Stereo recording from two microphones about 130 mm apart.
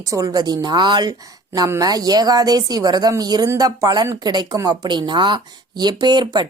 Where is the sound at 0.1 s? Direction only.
30° right (ahead or behind).